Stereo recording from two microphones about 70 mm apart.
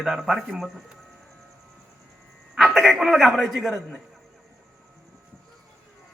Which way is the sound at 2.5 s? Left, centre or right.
Centre.